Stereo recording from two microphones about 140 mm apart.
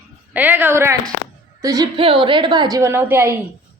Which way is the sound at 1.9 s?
40° right (ahead or behind).